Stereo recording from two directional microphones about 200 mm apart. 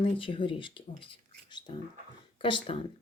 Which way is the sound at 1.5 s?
20° left (ahead or behind).